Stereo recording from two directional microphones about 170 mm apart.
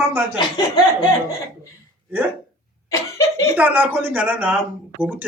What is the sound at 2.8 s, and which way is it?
Cough, 15° left (ahead or behind).